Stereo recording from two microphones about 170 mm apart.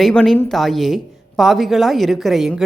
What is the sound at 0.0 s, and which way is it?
Speech, 5° left (ahead or behind).